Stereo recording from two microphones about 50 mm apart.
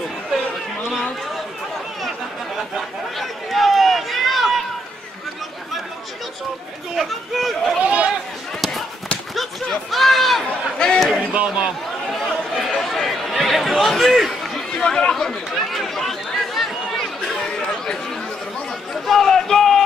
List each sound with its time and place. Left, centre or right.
2.0 s a sound: centre
7.0 s speech: centre
7.8 s chatter: right
8.5 s basketball bounce: centre
9.3 s a sound: centre
10.4 s speech: centre
11.3 s speech: right
12.5 s chatter: centre
14.8 s chatter: centre
19.0 s a sound: centre